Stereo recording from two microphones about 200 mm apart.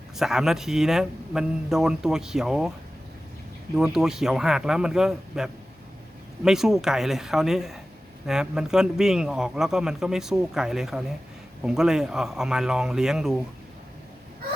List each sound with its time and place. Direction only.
0.2 s speech: centre (ahead or behind)
3.8 s speech: centre (ahead or behind)